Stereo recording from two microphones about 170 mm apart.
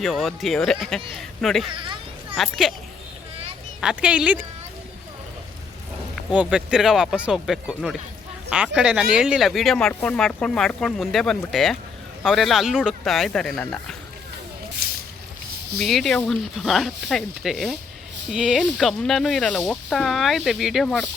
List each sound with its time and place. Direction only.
0.0 s speech: centre (ahead or behind)
1.7 s children playing: 30° right (ahead or behind)
2.3 s speech: centre (ahead or behind)
3.8 s speech: 5° right (ahead or behind)
6.3 s speech: 5° right (ahead or behind)
15.8 s speech: centre (ahead or behind)